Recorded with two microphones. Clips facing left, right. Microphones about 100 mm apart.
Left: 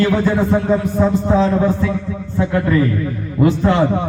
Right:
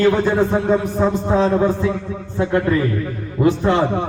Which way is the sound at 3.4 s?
20° right (ahead or behind).